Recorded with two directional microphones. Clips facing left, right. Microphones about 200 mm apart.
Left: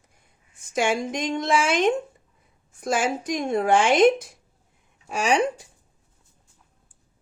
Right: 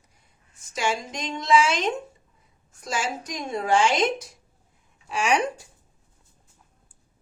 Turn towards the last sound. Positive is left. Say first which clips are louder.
# left 2 dB
turn(degrees=25)  # may be behind; listen again after turning